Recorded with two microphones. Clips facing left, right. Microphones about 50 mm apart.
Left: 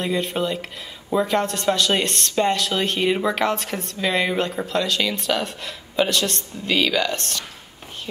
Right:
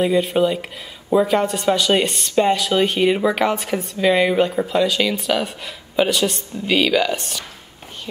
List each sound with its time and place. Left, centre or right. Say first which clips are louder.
0.0 s speech: right 6 dB; centre